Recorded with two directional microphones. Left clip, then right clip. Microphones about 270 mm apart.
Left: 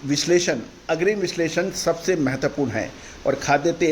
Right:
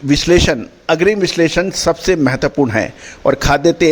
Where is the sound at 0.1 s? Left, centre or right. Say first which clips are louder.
Right 8 dB; right.